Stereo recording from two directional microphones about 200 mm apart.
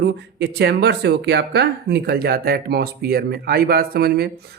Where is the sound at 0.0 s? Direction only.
55° right (ahead or behind).